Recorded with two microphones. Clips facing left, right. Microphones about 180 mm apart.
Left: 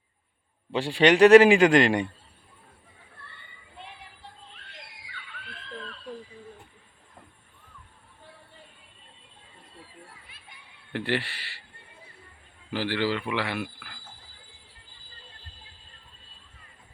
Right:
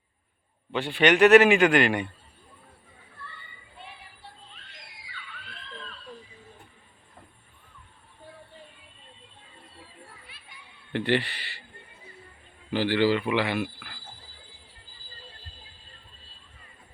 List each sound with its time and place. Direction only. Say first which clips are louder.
0.7 s a man's voice: left 2 dB; 30° left (ahead or behind)
10.9 s a man's voice: right 3 dB; 5° left (ahead or behind)
12.7 s a man's voice: right 4 dB; centre (ahead or behind)